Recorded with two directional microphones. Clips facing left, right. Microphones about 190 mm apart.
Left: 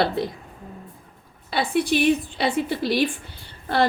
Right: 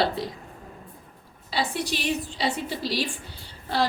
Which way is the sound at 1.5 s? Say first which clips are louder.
Left 7 dB; 55° left (ahead or behind).